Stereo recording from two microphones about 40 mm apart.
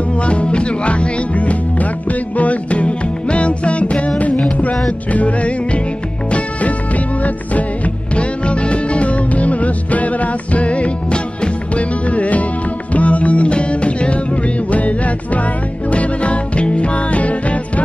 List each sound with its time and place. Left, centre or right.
0.1 s music: left
5.1 s music: left